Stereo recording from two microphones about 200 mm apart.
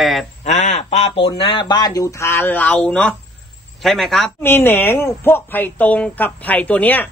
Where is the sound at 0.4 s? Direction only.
35° left (ahead or behind).